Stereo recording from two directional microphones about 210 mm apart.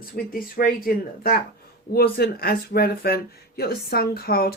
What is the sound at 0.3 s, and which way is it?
Speech, 45° left (ahead or behind).